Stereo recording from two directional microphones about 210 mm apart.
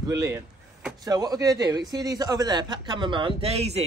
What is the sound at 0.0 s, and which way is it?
A man's voice, 15° right (ahead or behind).